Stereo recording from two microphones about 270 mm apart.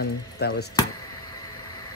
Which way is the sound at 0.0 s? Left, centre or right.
Left.